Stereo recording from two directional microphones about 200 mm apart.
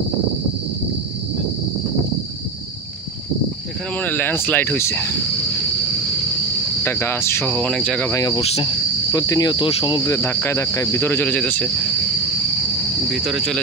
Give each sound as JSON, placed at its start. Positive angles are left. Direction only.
{"t": 4.0, "sound": "speech", "side_deg": 10}
{"t": 6.8, "sound": "speech", "side_deg": 10}
{"t": 8.4, "sound": "cricket", "side_deg": 30}
{"t": 9.1, "sound": "speech", "side_deg": 15}
{"t": 13.1, "sound": "speech", "side_deg": 0}